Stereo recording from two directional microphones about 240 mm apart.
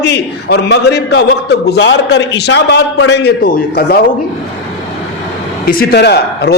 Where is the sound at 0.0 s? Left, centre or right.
Left.